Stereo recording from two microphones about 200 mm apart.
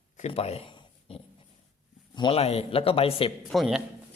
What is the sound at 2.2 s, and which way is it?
Speech, 25° left (ahead or behind).